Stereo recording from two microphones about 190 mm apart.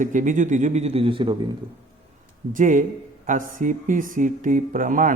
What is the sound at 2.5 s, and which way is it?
A man's voice, 45° right (ahead or behind).